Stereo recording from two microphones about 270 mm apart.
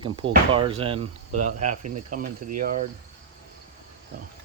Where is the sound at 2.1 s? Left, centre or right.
Right.